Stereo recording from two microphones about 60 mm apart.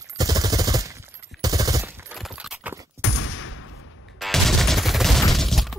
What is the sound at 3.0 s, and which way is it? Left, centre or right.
Fusillade, right.